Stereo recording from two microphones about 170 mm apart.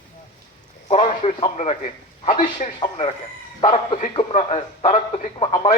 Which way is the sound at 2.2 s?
45° left (ahead or behind).